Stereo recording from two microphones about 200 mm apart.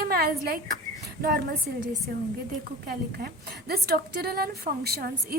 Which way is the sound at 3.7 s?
50° right (ahead or behind).